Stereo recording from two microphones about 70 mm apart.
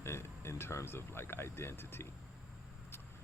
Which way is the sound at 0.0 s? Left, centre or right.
Left.